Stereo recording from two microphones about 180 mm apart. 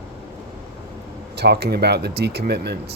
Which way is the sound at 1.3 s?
65° right (ahead or behind).